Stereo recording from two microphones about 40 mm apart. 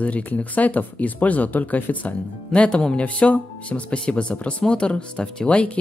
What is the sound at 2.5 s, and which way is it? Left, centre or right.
Speech, left.